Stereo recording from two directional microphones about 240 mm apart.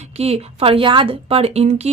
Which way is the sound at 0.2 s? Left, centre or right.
Right.